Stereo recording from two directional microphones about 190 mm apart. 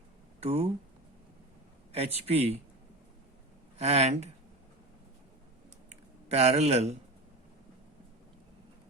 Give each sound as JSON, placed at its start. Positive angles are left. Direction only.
{"t": 0.3, "sound": "speech", "side_deg": -35}
{"t": 1.9, "sound": "a man's voice", "side_deg": -30}
{"t": 3.8, "sound": "a man's voice", "side_deg": -35}
{"t": 6.3, "sound": "a man's voice", "side_deg": -35}